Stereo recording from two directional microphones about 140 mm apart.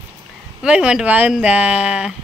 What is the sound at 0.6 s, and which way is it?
Speech, 5° right (ahead or behind).